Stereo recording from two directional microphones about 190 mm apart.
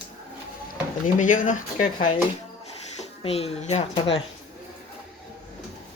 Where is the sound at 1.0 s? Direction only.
40° left (ahead or behind).